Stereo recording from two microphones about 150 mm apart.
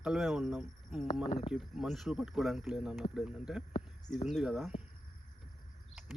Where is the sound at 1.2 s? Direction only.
45° left (ahead or behind).